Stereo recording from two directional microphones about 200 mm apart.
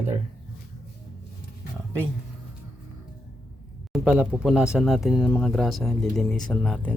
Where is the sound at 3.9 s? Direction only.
5° right (ahead or behind).